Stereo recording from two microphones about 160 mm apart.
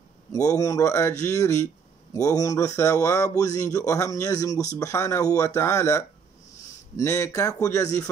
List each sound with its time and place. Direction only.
0.3 s speech: 20° left (ahead or behind)